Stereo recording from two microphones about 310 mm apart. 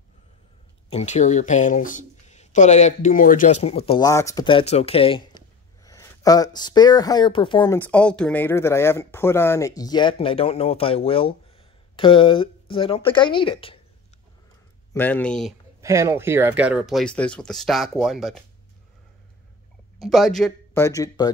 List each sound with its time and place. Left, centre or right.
0.8 s speech: left
14.9 s speech: centre
15.8 s speech: centre
20.0 s speech: centre